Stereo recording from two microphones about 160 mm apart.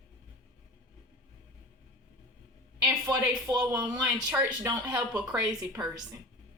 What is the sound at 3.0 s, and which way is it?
Speech, 25° right (ahead or behind).